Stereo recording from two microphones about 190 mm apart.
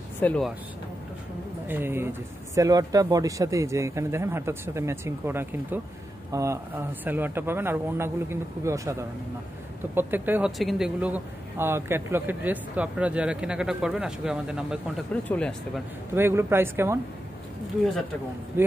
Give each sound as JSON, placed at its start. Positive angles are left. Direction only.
{"t": 0.2, "sound": "speech", "side_deg": 10}
{"t": 1.7, "sound": "speech", "side_deg": -10}
{"t": 9.9, "sound": "speech", "side_deg": -10}
{"t": 16.2, "sound": "speech", "side_deg": -15}